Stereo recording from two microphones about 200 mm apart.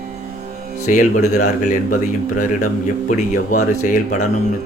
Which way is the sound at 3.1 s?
40° left (ahead or behind).